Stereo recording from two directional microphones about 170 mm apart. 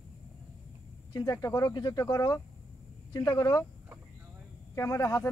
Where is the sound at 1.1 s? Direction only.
20° left (ahead or behind).